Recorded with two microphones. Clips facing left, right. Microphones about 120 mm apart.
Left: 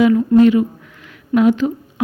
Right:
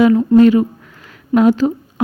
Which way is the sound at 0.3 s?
40° right (ahead or behind).